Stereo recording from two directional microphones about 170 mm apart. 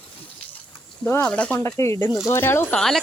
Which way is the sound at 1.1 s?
10° left (ahead or behind).